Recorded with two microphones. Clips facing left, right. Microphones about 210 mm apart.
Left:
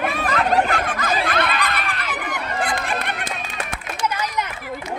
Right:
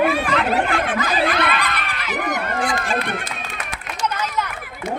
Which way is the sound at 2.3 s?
50° right (ahead or behind).